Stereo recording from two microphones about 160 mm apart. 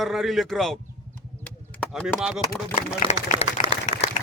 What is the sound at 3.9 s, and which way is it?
Applause, 50° left (ahead or behind).